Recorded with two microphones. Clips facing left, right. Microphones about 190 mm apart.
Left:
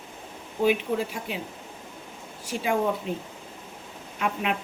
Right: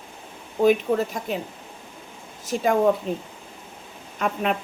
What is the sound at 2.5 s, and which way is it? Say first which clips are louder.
Speech: right 6 dB; 45° right (ahead or behind).